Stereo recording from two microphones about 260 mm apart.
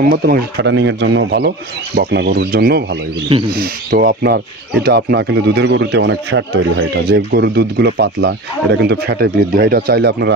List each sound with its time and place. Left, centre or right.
0.0 s speech: right